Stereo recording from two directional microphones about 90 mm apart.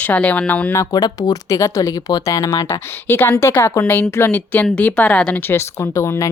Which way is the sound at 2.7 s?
25° left (ahead or behind).